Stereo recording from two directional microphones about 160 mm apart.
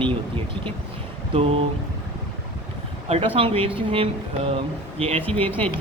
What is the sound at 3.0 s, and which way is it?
A man's voice, 35° right (ahead or behind).